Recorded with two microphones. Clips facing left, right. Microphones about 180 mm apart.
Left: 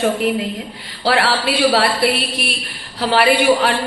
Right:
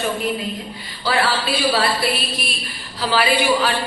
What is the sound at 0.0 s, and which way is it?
A woman's voice, 75° left (ahead or behind).